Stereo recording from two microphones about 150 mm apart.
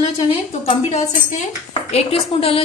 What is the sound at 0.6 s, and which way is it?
Speech, 45° left (ahead or behind).